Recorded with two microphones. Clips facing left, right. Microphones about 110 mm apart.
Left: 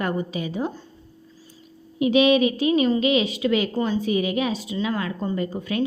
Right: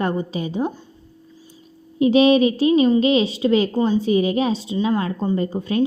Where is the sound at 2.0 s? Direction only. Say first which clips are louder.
Right 3 dB; 35° right (ahead or behind).